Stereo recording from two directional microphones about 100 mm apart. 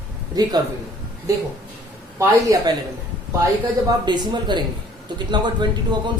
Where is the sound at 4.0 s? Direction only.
45° right (ahead or behind).